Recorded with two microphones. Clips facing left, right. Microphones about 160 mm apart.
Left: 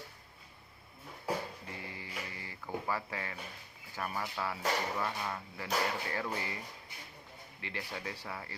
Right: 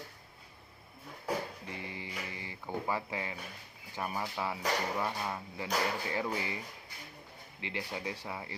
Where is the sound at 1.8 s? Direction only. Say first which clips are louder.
Right 2 dB; 20° right (ahead or behind).